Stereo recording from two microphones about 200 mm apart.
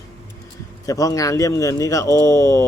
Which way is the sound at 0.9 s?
15° left (ahead or behind).